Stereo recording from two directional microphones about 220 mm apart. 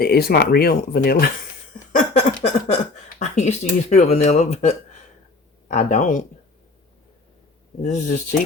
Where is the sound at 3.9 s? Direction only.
30° left (ahead or behind).